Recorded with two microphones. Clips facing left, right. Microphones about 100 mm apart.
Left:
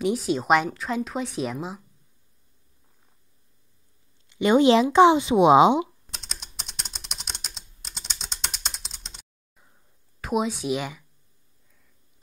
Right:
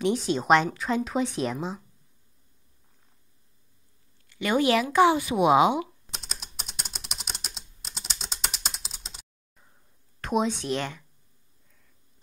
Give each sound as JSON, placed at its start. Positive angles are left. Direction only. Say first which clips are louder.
{"t": 0.0, "sound": "speech", "louder": "left 1 dB", "side_deg": 5}
{"t": 4.3, "sound": "speech", "louder": "left 6 dB", "side_deg": 20}
{"t": 5.9, "sound": "typing", "louder": "right 1 dB", "side_deg": 0}
{"t": 10.2, "sound": "speech", "louder": "left 1 dB", "side_deg": 5}